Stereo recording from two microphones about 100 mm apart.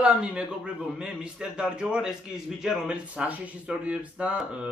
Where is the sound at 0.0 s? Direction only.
10° right (ahead or behind).